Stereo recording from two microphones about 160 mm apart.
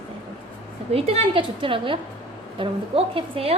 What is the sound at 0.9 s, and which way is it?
A woman's voice, 40° right (ahead or behind).